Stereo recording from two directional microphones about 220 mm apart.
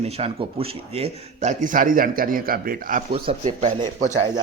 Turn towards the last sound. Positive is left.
turn(degrees=-30)  # may be behind; listen again after turning